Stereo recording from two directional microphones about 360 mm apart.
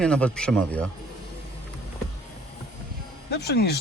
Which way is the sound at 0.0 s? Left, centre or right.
Centre.